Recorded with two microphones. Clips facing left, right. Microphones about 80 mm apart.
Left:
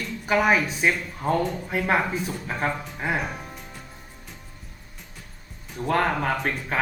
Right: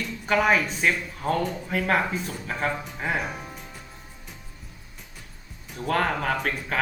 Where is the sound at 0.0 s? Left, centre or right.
Centre.